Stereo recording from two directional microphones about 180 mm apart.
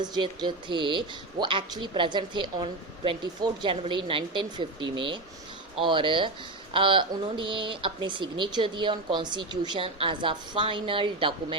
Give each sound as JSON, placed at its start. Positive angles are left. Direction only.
{"t": 0.0, "sound": "speech", "side_deg": -25}